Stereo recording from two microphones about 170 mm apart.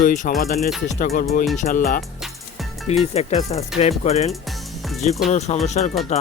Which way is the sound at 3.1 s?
40° left (ahead or behind).